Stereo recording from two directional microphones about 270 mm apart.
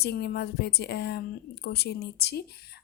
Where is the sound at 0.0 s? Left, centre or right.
Left.